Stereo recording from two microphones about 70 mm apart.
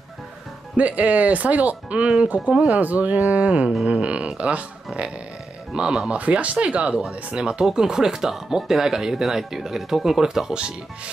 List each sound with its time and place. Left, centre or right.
0.7 s speech: right
5.7 s speech: centre